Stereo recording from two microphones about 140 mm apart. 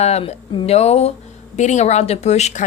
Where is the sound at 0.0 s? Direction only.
50° left (ahead or behind).